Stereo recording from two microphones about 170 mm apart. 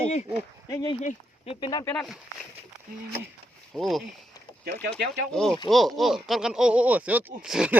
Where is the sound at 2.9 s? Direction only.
55° right (ahead or behind).